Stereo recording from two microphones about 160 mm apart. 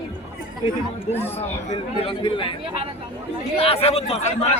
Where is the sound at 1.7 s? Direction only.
30° left (ahead or behind).